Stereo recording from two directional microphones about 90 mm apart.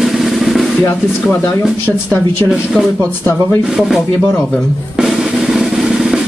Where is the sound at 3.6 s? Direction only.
5° right (ahead or behind).